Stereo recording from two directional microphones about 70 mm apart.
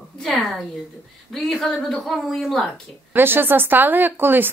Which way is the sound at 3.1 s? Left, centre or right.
Right.